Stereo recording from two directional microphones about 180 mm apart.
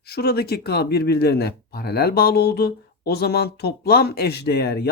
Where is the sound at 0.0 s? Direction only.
60° left (ahead or behind).